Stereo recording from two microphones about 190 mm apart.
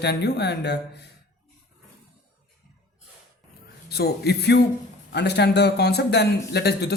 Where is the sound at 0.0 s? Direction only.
60° left (ahead or behind).